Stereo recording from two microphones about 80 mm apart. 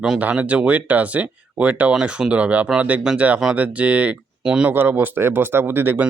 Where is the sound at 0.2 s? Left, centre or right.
Centre.